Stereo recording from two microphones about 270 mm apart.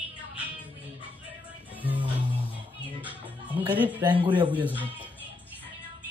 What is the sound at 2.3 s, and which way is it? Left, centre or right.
Music, centre.